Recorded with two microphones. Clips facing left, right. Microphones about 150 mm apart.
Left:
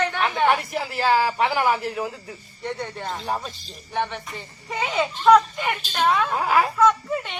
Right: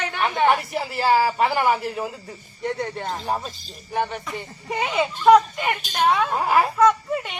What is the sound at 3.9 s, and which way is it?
A child's voice, 45° right (ahead or behind).